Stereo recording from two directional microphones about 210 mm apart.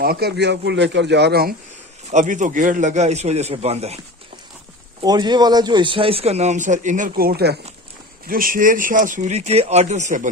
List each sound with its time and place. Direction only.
0.0 s speech: 45° right (ahead or behind)
2.0 s speech: 35° right (ahead or behind)
5.0 s speech: 20° right (ahead or behind); by 10.2 s 35° right (ahead or behind)